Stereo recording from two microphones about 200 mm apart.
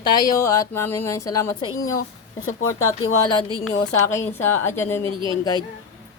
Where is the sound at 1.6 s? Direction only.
90° left.